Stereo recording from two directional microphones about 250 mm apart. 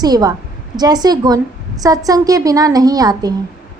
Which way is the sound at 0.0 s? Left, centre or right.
Centre.